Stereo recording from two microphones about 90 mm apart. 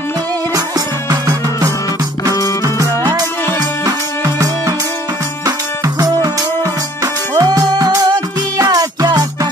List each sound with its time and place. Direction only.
0.7 s music: 40° right (ahead or behind)
7.3 s music: 40° right (ahead or behind)